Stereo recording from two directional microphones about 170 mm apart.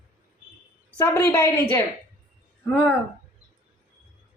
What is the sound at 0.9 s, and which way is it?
Speech, 15° left (ahead or behind).